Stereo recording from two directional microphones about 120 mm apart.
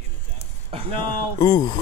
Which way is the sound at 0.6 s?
55° right (ahead or behind).